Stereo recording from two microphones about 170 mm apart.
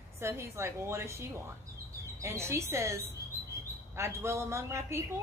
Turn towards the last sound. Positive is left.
turn(degrees=-15)  # may be behind; listen again after turning